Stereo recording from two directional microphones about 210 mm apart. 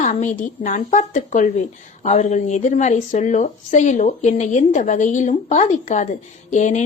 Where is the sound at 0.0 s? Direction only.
35° left (ahead or behind).